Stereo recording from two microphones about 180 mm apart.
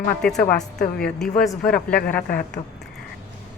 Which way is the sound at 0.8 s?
60° left (ahead or behind).